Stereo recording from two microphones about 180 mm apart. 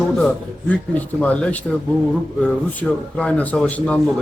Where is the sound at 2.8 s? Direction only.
10° left (ahead or behind).